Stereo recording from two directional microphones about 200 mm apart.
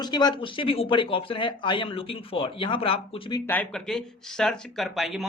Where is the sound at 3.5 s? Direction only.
5° left (ahead or behind).